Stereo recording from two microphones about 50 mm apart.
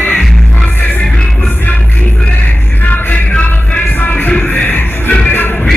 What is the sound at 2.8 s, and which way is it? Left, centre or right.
Music, left.